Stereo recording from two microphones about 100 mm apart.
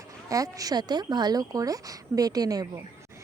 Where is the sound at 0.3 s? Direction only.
35° right (ahead or behind).